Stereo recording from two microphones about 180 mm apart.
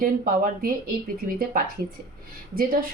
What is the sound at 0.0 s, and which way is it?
Speech, 50° right (ahead or behind).